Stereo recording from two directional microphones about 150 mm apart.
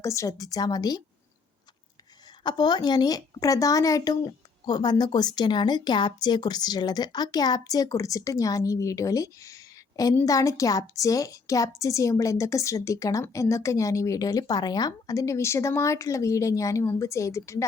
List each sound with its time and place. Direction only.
0.0 s a woman's voice: 20° left (ahead or behind)
2.4 s a woman's voice: 30° left (ahead or behind)